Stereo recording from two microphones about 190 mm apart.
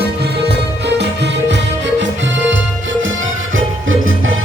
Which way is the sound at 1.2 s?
70° right (ahead or behind).